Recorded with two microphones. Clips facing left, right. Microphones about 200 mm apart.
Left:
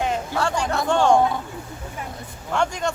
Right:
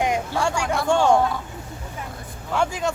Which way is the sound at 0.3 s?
10° right (ahead or behind).